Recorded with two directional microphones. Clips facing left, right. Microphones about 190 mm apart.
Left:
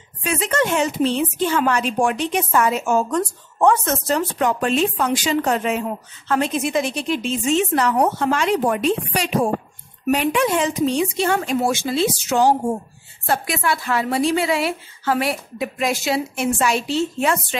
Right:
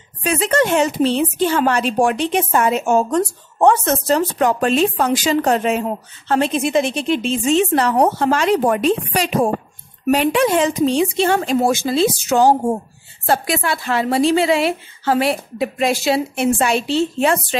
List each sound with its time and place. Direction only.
0.2 s a woman's voice: 35° right (ahead or behind)
10.1 s a woman's voice: 35° right (ahead or behind)
13.3 s a woman's voice: 30° right (ahead or behind)